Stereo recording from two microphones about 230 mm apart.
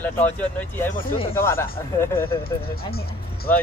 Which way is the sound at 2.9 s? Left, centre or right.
Left.